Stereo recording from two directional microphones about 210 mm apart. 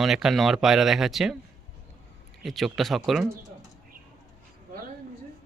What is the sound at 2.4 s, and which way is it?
Speech, centre (ahead or behind).